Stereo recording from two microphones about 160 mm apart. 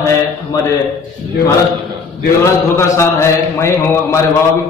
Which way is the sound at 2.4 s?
15° left (ahead or behind).